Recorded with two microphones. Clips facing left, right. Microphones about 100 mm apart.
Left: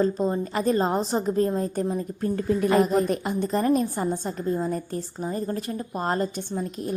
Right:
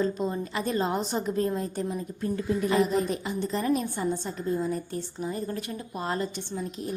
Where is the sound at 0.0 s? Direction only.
40° left (ahead or behind).